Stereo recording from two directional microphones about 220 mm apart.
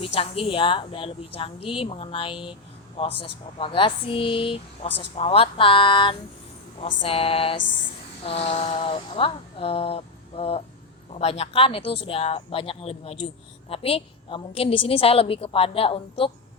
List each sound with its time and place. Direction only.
0.0 s speech: 25° left (ahead or behind)